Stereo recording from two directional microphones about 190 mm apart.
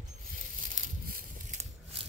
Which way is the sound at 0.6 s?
45° right (ahead or behind).